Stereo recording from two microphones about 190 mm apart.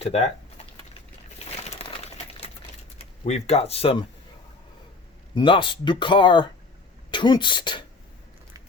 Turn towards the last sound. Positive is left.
turn(degrees=25)  # may be behind; listen again after turning